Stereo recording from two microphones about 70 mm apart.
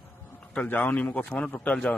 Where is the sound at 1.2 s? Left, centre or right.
Centre.